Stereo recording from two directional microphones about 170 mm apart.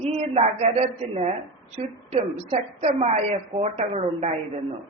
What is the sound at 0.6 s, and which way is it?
Speech, 40° right (ahead or behind).